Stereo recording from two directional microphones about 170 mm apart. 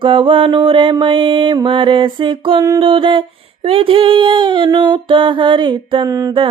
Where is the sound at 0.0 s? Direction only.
30° right (ahead or behind).